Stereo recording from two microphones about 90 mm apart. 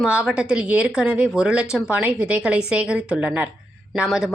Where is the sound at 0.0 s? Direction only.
10° right (ahead or behind).